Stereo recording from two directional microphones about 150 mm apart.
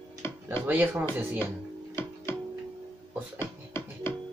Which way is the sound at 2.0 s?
15° left (ahead or behind).